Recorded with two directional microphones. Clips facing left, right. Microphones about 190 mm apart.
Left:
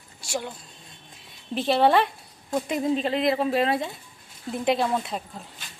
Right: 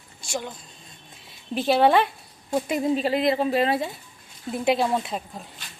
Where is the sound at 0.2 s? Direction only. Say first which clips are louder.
Even; 10° left (ahead or behind).